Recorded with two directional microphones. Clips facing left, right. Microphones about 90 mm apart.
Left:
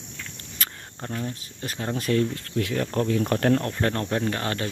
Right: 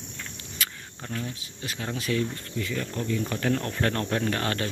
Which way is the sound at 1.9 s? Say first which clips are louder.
Left 5 dB; 45° left (ahead or behind).